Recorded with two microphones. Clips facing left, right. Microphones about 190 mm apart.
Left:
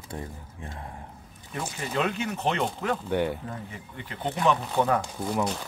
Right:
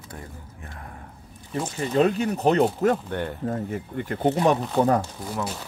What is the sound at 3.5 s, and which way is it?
Speech, 50° right (ahead or behind).